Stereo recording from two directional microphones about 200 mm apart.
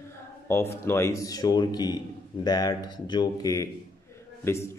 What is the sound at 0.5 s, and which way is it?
A man's voice, 10° left (ahead or behind).